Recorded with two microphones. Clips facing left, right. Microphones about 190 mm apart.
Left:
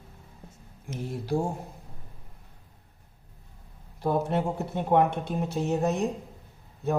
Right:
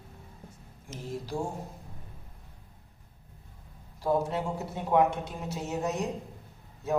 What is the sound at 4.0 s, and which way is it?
A man's voice, 60° left (ahead or behind).